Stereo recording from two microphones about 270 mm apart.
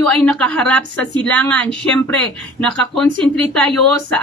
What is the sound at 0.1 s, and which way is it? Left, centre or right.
A woman's voice, centre.